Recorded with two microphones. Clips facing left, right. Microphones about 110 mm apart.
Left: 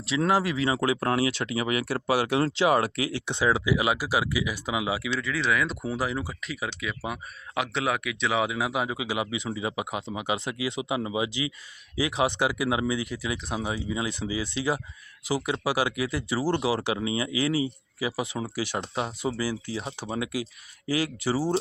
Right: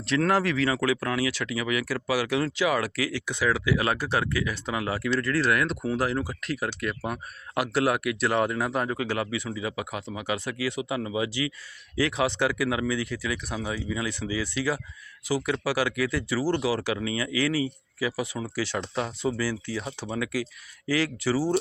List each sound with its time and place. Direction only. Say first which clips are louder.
0.2 s speech: even; 10° left (ahead or behind)